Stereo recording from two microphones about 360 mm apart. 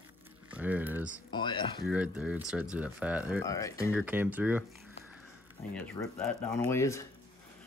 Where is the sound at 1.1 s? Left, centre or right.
Centre.